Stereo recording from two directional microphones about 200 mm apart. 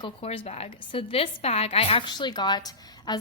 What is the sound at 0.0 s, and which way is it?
A woman's voice, 25° left (ahead or behind).